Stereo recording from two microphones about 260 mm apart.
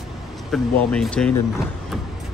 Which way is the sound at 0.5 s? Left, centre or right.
Centre.